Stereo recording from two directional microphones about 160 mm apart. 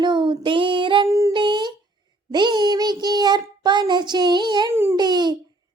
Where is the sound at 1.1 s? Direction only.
20° right (ahead or behind).